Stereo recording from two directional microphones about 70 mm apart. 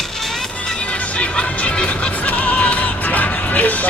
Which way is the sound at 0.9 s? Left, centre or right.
Centre.